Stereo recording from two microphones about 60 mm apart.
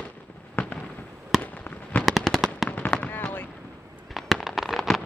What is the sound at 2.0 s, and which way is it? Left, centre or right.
Fireworks, centre.